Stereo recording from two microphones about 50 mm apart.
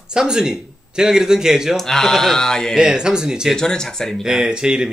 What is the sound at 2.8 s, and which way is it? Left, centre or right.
Speech, centre.